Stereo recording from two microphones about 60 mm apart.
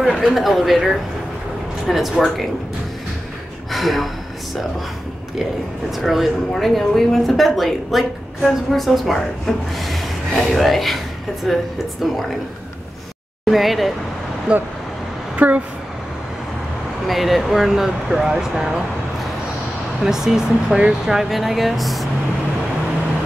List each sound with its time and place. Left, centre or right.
0.0 s a woman's voice: centre
3.7 s speech: centre
5.9 s a woman's voice: centre
13.5 s a woman's voice: centre
14.5 s speech: centre
15.3 s speech: right
17.1 s a woman's voice: centre
20.0 s speech: centre